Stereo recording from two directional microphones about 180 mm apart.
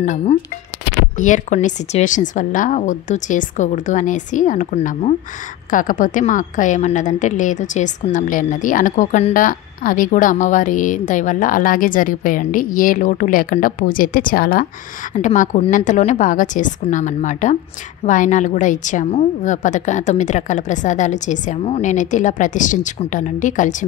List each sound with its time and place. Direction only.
0.0 s a woman's voice: 40° left (ahead or behind)
15.1 s a woman's voice: 45° left (ahead or behind)